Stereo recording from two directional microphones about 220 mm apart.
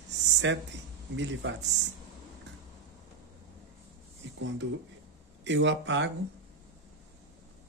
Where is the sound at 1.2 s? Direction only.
55° right (ahead or behind).